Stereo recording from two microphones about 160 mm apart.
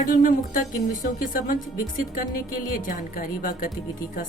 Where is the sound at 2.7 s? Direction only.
60° left (ahead or behind).